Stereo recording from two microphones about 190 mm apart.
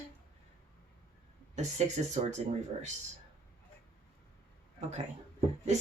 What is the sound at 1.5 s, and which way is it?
Speech, 35° right (ahead or behind).